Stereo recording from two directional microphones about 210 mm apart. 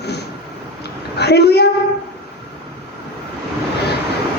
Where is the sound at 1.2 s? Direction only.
50° left (ahead or behind).